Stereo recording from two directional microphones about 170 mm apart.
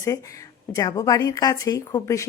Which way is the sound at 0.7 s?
20° left (ahead or behind).